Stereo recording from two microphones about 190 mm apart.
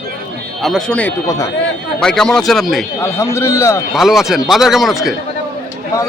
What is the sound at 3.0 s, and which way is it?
Speech, 15° left (ahead or behind).